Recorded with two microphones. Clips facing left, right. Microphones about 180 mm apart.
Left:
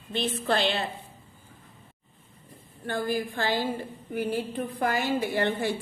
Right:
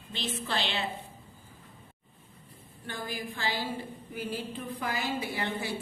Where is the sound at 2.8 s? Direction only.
55° left (ahead or behind).